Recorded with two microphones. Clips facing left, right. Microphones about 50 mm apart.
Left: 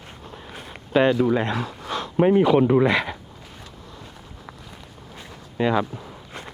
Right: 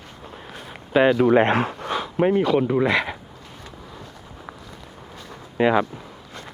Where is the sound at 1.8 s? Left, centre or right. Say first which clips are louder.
Left 4 dB; centre.